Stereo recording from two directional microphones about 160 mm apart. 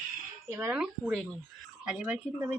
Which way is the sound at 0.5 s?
15° right (ahead or behind).